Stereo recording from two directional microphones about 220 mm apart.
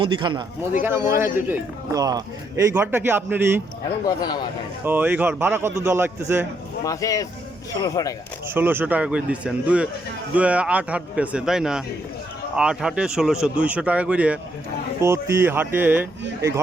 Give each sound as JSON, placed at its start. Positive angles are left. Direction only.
{"t": 0.0, "sound": "a man's voice", "side_deg": -20}
{"t": 4.0, "sound": "speech", "side_deg": 15}
{"t": 4.9, "sound": "speech", "side_deg": -10}
{"t": 6.8, "sound": "speech", "side_deg": 15}
{"t": 8.4, "sound": "speech", "side_deg": -10}